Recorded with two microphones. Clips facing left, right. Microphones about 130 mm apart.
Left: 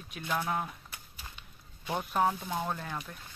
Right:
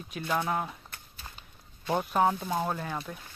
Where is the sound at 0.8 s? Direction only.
10° left (ahead or behind).